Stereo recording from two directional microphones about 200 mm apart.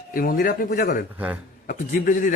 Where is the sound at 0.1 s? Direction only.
45° left (ahead or behind).